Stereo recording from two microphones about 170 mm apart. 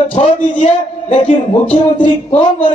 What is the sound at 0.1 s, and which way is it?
Speech, 35° left (ahead or behind).